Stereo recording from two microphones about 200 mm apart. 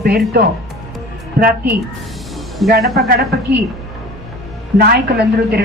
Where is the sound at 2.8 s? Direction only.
Centre (ahead or behind).